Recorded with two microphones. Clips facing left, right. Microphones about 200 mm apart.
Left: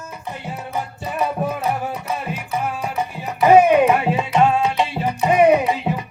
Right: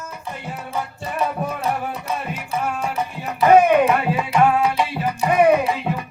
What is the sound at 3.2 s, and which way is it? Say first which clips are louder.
Music: left 1 dB; 15° left (ahead or behind).